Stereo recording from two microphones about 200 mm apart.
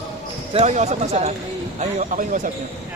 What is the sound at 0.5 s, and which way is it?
Speech, 35° right (ahead or behind).